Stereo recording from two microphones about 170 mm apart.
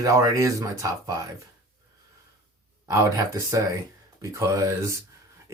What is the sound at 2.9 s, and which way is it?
Speech, 20° right (ahead or behind).